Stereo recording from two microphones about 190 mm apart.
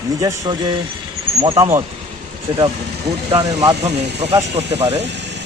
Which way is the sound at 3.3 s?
30° right (ahead or behind).